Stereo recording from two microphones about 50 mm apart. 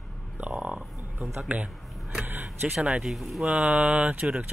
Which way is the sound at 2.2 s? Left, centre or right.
Right.